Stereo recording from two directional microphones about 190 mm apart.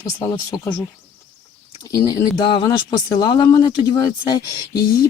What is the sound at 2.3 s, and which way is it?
Speech, 25° left (ahead or behind).